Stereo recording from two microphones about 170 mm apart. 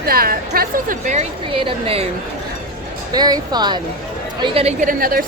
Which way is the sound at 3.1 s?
25° right (ahead or behind).